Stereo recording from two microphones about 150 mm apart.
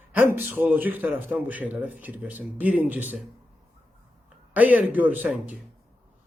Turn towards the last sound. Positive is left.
turn(degrees=-10)  # may be behind; listen again after turning